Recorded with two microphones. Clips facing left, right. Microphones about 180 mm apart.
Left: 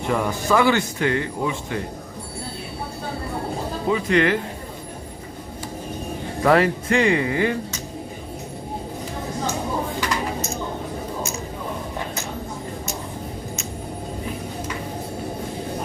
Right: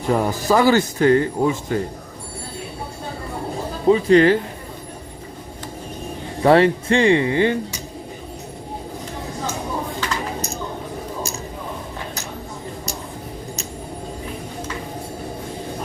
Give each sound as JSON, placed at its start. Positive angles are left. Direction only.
{"t": 0.1, "sound": "speech", "side_deg": -35}
{"t": 3.8, "sound": "speech", "side_deg": -30}
{"t": 6.4, "sound": "speech", "side_deg": -30}